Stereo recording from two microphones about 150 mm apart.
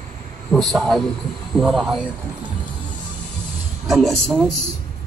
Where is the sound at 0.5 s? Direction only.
5° left (ahead or behind).